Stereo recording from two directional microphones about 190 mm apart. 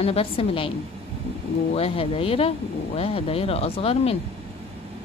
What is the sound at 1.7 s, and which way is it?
A woman's voice, 30° left (ahead or behind).